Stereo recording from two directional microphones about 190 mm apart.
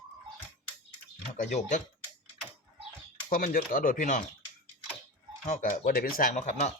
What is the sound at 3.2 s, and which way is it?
Speech, 45° left (ahead or behind).